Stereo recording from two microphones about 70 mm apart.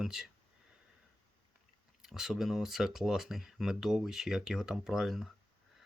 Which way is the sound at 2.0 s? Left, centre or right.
Centre.